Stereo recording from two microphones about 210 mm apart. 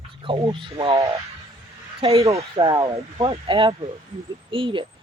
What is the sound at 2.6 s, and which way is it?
Speech, 15° right (ahead or behind).